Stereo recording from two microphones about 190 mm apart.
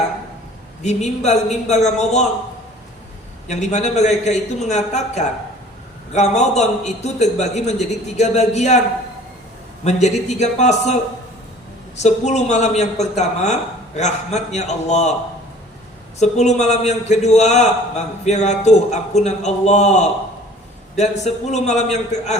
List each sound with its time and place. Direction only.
0.8 s a man's voice: 35° left (ahead or behind)
3.4 s a man's voice: 35° left (ahead or behind)
9.8 s a man's voice: 35° left (ahead or behind)
11.9 s a man's voice: 35° left (ahead or behind)
16.1 s a man's voice: 35° left (ahead or behind)